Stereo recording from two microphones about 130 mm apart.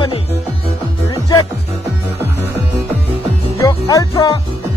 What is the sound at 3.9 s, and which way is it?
Speech, 30° left (ahead or behind).